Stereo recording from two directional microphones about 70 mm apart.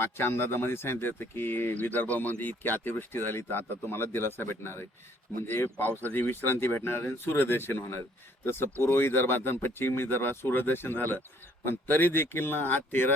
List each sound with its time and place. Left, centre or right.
0.0 s speech: left